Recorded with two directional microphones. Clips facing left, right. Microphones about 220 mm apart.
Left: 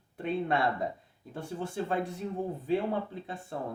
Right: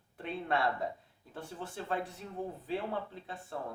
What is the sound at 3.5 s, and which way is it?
Speech, 15° left (ahead or behind).